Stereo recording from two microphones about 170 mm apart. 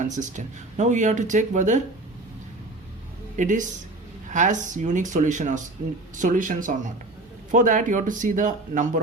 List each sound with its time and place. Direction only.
0.0 s speech: 45° right (ahead or behind)
3.3 s speech: 45° right (ahead or behind)